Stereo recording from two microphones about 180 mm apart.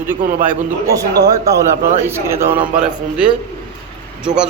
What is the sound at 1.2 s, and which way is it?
A man's voice, 20° right (ahead or behind).